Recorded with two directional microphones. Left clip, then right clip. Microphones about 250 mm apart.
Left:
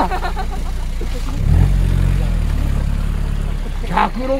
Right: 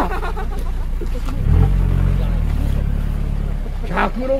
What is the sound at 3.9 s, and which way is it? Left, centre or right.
Speech, left.